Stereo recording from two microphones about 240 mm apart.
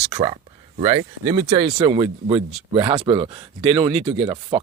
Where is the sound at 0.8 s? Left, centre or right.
Right.